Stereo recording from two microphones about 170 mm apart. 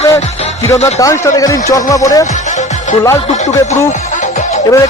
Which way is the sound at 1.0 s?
20° left (ahead or behind).